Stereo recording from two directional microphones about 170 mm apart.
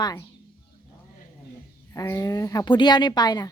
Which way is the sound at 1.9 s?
20° left (ahead or behind).